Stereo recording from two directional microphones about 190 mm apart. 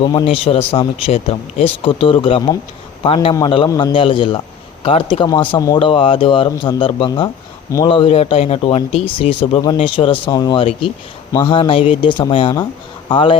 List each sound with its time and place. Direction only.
0.0 s speech: 25° left (ahead or behind)